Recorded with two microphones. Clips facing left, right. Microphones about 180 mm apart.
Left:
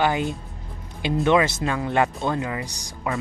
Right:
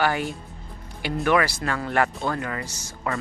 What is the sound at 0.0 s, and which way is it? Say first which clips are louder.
Speech: left 2 dB; 20° left (ahead or behind).